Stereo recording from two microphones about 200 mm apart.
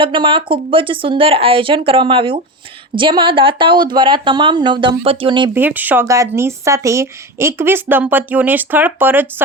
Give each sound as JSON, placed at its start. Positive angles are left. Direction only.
{"t": 0.0, "sound": "a woman's voice", "side_deg": -25}
{"t": 5.5, "sound": "speech", "side_deg": -10}